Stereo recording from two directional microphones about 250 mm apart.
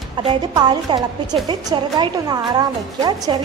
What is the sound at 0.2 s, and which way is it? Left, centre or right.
A woman's voice, centre.